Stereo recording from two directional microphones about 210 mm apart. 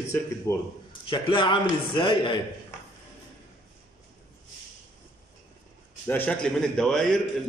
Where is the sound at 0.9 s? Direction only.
25° left (ahead or behind).